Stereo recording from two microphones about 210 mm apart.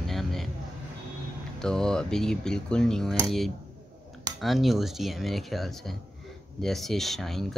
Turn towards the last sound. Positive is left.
turn(degrees=0)  # may be behind; listen again after turning